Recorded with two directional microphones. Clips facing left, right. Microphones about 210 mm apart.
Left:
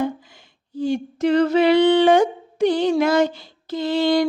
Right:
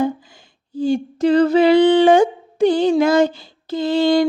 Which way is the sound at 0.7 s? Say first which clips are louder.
Right 4 dB; 30° right (ahead or behind).